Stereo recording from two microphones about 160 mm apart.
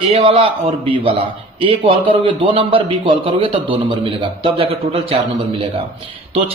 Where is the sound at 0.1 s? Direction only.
35° right (ahead or behind).